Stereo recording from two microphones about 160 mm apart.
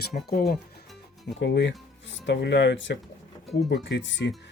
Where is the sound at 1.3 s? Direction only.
90° left.